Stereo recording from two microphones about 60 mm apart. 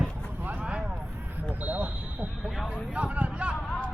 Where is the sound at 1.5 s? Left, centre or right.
Right.